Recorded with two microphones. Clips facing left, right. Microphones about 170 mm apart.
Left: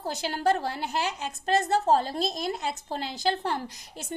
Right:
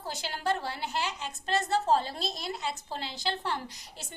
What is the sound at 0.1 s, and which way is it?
A woman's voice, 45° left (ahead or behind).